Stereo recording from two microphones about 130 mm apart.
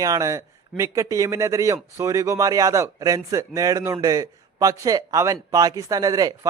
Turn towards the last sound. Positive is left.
turn(degrees=-30)  # may be behind; listen again after turning